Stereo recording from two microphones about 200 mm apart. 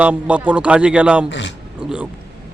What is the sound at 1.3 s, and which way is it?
Speech, 60° left (ahead or behind).